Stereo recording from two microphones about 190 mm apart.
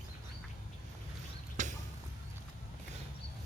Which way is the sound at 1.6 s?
40° right (ahead or behind).